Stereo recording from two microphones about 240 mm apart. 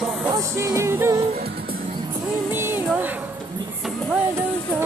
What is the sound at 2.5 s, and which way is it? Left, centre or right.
Music, centre.